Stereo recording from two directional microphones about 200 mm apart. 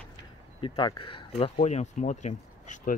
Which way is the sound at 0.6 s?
20° left (ahead or behind).